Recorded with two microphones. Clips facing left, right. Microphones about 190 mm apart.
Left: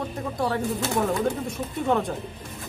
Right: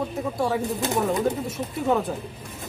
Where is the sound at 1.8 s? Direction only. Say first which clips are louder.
Right 1 dB; 5° right (ahead or behind).